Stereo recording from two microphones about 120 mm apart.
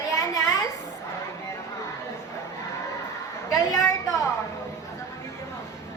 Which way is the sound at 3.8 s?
25° left (ahead or behind).